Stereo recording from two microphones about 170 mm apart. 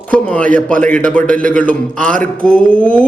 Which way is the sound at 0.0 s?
5° left (ahead or behind).